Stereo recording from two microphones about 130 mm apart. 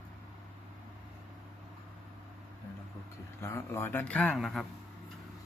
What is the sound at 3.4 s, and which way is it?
Speech, 20° left (ahead or behind).